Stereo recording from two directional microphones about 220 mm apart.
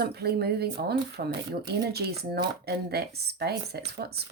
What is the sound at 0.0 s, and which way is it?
Speech, 45° right (ahead or behind).